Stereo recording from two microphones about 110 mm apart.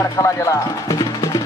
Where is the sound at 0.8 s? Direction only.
35° left (ahead or behind).